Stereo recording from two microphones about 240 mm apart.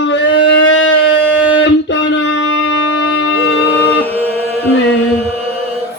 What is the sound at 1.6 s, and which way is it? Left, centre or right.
Wind instrument, left.